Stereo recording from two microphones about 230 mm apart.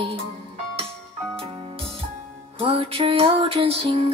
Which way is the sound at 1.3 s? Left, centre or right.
Right.